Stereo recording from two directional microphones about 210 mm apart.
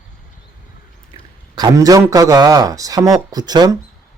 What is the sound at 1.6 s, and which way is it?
Speech, 15° right (ahead or behind).